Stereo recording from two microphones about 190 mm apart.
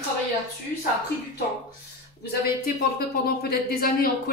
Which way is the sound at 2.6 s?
55° left (ahead or behind).